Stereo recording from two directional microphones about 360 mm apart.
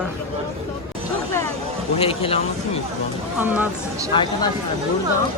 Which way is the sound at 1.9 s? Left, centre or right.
Centre.